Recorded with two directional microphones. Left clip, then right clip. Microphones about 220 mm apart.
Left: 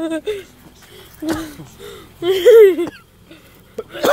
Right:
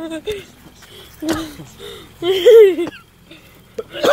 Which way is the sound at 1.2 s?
5° left (ahead or behind).